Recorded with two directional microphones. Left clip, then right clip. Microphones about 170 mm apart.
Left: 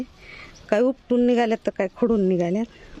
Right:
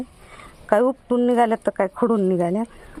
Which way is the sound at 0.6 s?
20° left (ahead or behind).